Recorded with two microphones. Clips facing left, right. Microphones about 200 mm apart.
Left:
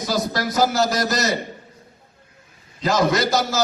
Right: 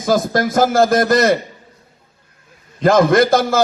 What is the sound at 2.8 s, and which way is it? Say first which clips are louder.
Speech: right 7 dB; 55° right (ahead or behind).